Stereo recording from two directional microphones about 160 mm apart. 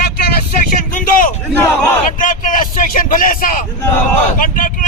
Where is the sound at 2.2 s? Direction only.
55° left (ahead or behind).